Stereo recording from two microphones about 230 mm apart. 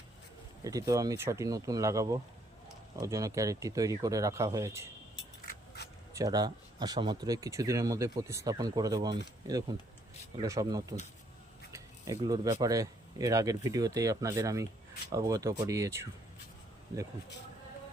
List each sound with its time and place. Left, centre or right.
0.6 s speech: centre
5.5 s a sound: left
6.1 s speech: centre